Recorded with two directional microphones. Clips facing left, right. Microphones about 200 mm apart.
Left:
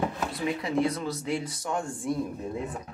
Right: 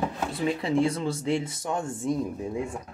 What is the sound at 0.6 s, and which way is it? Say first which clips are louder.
Speech: right 2 dB; 30° right (ahead or behind).